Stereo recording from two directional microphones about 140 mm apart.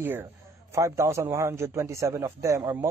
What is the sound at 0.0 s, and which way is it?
A man's voice, 15° right (ahead or behind).